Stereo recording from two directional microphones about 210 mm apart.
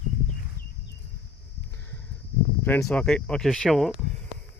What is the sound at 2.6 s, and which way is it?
Speech, 5° left (ahead or behind).